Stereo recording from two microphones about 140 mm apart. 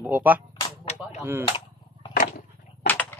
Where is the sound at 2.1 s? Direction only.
90° left.